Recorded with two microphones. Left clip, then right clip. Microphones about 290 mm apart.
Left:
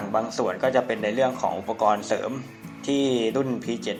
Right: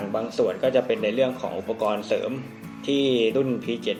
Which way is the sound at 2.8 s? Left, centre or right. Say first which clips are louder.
Right 2 dB; left.